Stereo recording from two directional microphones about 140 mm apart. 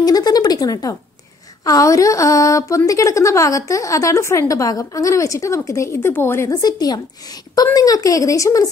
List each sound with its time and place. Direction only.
0.0 s speech: 25° left (ahead or behind)